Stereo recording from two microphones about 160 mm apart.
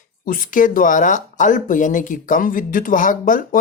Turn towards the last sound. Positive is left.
turn(degrees=55)  # may be behind; listen again after turning